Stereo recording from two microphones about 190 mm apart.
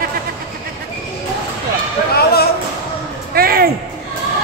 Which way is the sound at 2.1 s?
55° left (ahead or behind).